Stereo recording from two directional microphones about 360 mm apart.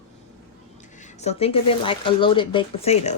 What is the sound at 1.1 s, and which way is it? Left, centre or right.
Speech, centre.